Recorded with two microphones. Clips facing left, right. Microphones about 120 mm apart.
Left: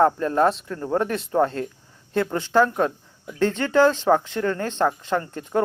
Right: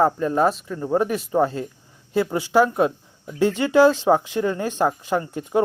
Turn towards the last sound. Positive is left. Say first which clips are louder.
# right 2 dB
turn(degrees=-10)  # may be behind; listen again after turning